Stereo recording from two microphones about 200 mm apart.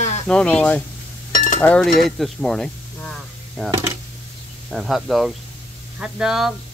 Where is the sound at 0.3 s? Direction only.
5° left (ahead or behind).